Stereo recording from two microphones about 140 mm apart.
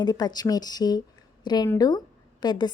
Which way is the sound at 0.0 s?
30° left (ahead or behind).